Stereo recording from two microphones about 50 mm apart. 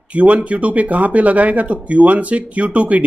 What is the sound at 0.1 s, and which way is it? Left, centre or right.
Speech, right.